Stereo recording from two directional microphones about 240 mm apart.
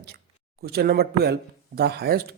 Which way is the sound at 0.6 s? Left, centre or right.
Right.